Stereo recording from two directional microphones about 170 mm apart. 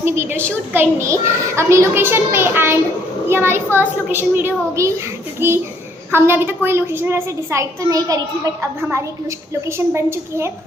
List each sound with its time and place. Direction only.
0.0 s a child's voice: 15° right (ahead or behind)
9.6 s a child's voice: 15° right (ahead or behind)